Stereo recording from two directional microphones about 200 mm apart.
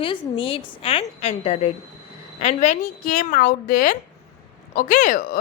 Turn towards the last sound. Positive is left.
turn(degrees=45)  # may be behind; listen again after turning